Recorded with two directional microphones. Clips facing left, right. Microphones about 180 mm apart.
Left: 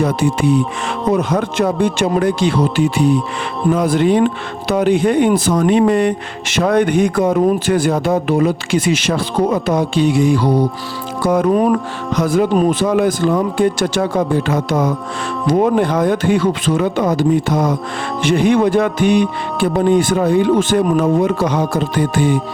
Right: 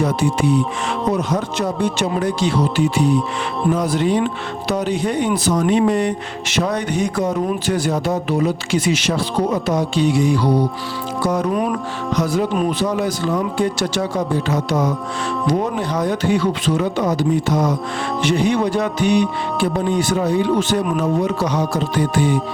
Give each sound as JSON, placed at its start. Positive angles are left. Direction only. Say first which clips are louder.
{"t": 0.0, "sound": "speech", "louder": "left 2 dB", "side_deg": 55}